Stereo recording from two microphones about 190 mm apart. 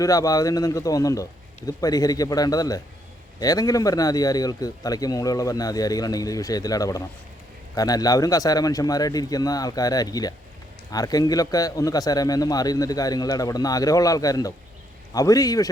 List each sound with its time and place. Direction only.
0.0 s speech: 20° left (ahead or behind)